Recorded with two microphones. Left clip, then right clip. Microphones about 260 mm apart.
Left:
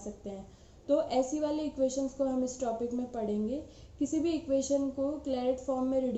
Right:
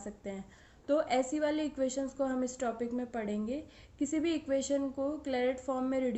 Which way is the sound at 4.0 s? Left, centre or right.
Right.